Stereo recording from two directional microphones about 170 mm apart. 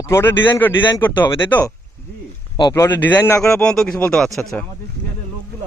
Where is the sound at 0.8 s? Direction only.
25° left (ahead or behind).